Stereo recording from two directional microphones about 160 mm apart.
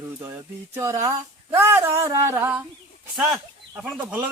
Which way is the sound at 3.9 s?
10° right (ahead or behind).